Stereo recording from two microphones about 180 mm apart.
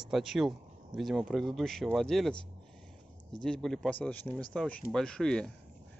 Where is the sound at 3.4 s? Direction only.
Centre (ahead or behind).